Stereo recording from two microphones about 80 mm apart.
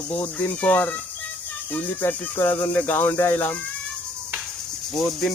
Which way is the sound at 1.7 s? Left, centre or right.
Left.